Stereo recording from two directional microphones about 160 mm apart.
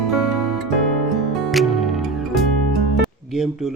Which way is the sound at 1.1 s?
Centre (ahead or behind).